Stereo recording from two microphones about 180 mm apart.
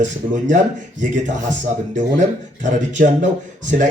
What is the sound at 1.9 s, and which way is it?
A man's voice, 45° right (ahead or behind).